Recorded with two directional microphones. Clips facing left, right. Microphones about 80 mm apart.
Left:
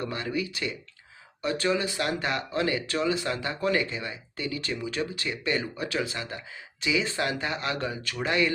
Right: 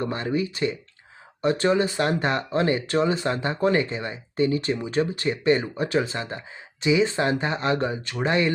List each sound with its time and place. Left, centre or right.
0.0 s speech: right